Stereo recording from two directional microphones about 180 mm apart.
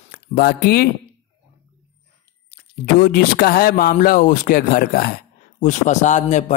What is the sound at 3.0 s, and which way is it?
Speech, 55° left (ahead or behind).